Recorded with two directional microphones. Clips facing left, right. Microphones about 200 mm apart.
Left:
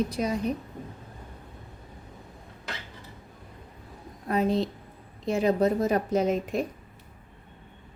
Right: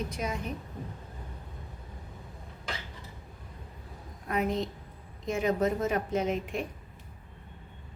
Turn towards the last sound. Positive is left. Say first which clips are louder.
# left 5 dB
turn(degrees=40)  # may be behind; listen again after turning